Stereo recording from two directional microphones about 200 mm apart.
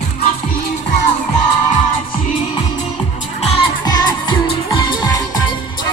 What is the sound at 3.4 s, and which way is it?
Music, 30° left (ahead or behind).